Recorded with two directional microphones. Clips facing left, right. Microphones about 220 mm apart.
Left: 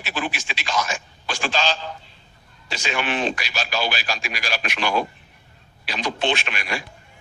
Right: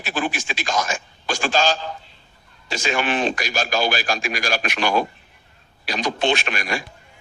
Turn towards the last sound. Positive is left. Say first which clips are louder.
# right 3 dB
turn(degrees=-45)  # may be behind; listen again after turning